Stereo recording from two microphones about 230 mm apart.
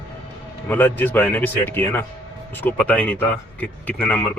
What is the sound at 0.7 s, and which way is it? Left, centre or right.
A man's voice, centre.